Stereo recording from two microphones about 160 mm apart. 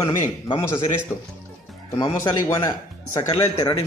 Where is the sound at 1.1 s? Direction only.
15° left (ahead or behind).